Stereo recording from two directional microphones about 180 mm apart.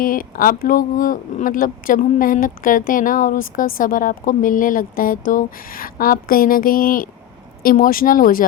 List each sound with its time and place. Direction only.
0.0 s speech: 50° left (ahead or behind)